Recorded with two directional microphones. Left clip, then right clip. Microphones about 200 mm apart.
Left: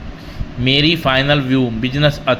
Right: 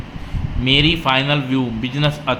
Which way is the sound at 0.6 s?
15° left (ahead or behind).